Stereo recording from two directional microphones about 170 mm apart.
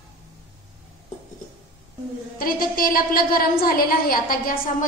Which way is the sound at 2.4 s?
60° left (ahead or behind).